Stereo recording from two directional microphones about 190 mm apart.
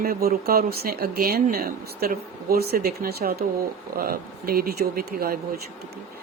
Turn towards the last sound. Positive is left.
turn(degrees=-50)  # may be behind; listen again after turning